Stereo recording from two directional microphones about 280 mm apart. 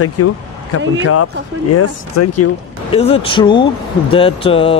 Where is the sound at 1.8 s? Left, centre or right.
Left.